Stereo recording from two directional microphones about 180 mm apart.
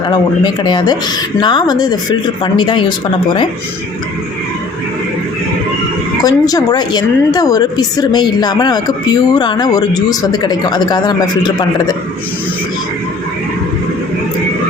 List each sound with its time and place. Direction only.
0.1 s a woman's voice: 25° left (ahead or behind)
6.2 s a woman's voice: 20° left (ahead or behind)